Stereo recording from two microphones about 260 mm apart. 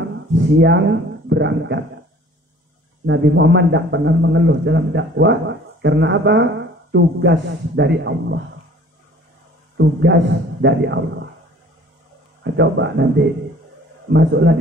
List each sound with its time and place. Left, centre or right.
0.6 s speech: right
3.1 s a man's voice: right
9.8 s a man's voice: right
12.4 s a man's voice: right
14.1 s a man's voice: right